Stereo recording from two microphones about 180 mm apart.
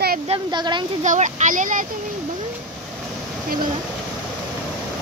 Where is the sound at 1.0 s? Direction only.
45° right (ahead or behind).